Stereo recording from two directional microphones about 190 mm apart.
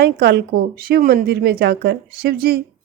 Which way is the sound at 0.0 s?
60° right (ahead or behind).